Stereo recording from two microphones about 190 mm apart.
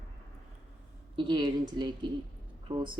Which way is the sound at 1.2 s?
25° right (ahead or behind).